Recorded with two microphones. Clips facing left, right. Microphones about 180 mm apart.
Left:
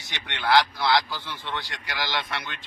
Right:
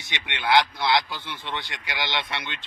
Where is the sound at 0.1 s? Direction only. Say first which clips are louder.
Even; 20° right (ahead or behind).